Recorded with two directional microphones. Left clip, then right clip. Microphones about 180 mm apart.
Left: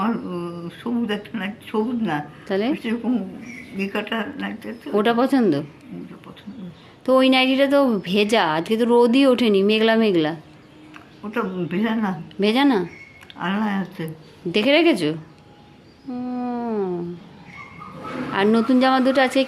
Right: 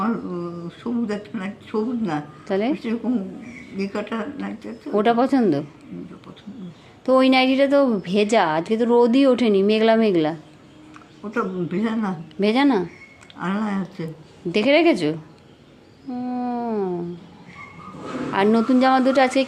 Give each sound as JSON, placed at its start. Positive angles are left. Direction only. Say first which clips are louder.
{"t": 0.0, "sound": "a woman's voice", "louder": "even", "side_deg": 0}
{"t": 7.0, "sound": "a woman's voice", "louder": "even", "side_deg": 0}
{"t": 16.1, "sound": "a sound", "louder": "right 1 dB", "side_deg": 5}
{"t": 18.3, "sound": "a woman's voice", "louder": "even", "side_deg": 0}